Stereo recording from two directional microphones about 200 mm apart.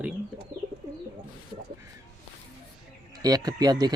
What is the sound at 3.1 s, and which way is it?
Speech, 20° right (ahead or behind).